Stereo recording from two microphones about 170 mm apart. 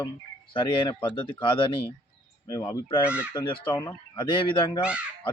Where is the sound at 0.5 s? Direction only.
30° left (ahead or behind).